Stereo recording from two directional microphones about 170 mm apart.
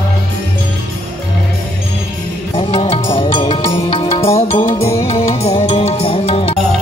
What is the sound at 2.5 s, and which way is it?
Music, 35° left (ahead or behind).